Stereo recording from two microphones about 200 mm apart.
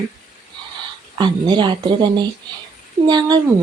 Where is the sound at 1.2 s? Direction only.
20° right (ahead or behind).